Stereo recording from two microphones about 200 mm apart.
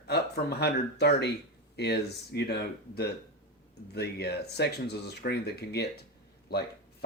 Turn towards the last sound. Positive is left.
turn(degrees=55)  # may be behind; listen again after turning